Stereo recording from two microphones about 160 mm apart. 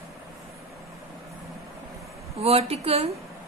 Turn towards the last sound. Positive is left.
turn(degrees=-40)  # may be behind; listen again after turning